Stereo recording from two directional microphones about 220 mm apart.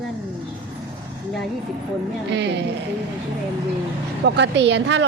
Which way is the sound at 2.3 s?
50° right (ahead or behind).